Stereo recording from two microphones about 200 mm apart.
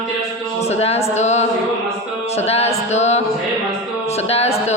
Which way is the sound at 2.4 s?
30° left (ahead or behind).